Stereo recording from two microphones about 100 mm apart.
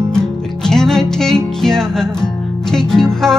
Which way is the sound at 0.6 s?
5° left (ahead or behind).